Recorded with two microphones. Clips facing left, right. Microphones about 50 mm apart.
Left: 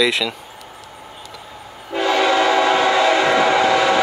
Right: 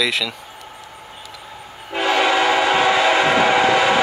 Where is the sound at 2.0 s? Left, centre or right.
Centre.